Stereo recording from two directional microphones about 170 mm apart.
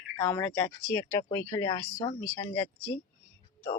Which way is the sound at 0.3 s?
10° left (ahead or behind).